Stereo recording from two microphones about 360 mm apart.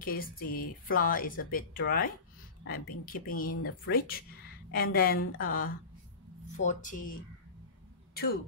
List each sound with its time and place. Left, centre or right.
0.0 s speech: left